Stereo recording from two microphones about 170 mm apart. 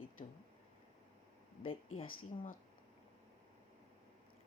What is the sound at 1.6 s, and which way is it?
Speech, 35° left (ahead or behind).